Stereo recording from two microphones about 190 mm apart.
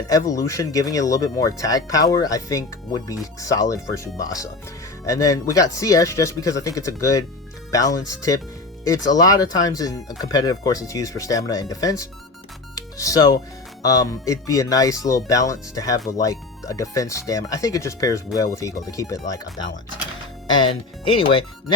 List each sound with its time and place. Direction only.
0.1 s speech: 20° left (ahead or behind)
12.7 s music: 20° left (ahead or behind)
13.8 s speech: 20° left (ahead or behind)
21.2 s speech: 25° left (ahead or behind)